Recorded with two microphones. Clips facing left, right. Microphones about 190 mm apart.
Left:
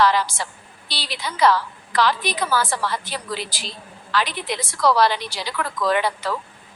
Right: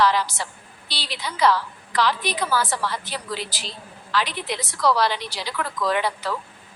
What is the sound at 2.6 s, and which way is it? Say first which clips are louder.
Speech: left 2 dB; 50° left (ahead or behind).